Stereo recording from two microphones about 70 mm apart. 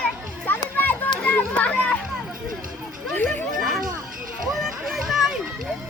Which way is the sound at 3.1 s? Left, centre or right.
Left.